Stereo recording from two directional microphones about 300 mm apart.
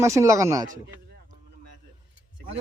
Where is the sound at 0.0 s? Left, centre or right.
Centre.